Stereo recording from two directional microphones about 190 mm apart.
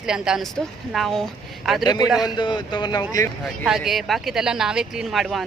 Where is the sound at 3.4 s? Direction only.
Centre (ahead or behind).